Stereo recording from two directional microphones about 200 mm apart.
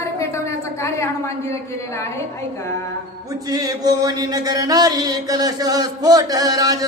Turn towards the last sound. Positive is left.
turn(degrees=-20)  # may be behind; listen again after turning